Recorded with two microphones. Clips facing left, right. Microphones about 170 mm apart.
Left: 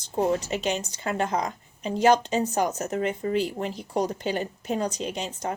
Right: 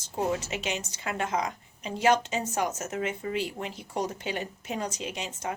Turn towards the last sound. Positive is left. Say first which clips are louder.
# left 4 dB
turn(degrees=35)  # may be behind; listen again after turning